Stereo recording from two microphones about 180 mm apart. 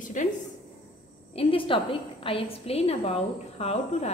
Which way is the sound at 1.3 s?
30° left (ahead or behind).